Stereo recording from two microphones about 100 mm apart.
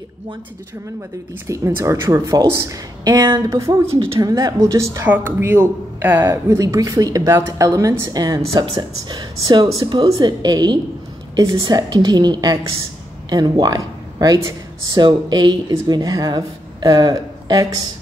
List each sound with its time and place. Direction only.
1.5 s a woman's voice: 30° right (ahead or behind)